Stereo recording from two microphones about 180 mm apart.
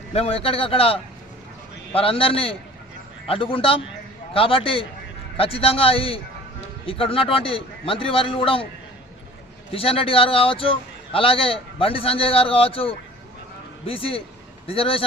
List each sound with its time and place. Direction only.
0.1 s a man's voice: 35° left (ahead or behind)
9.7 s a man's voice: 30° left (ahead or behind)